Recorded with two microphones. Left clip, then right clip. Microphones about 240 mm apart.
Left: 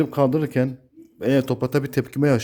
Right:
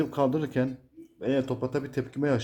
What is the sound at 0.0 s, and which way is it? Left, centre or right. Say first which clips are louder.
Speech: left 6 dB; left.